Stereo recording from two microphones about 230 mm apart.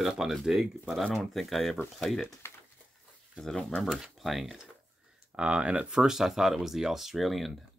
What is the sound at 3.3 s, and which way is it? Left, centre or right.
Speech, centre.